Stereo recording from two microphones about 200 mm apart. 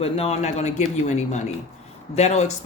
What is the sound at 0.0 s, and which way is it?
Speech, 30° left (ahead or behind).